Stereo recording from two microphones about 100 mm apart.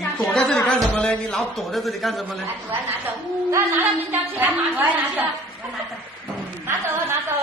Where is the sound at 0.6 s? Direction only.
10° left (ahead or behind).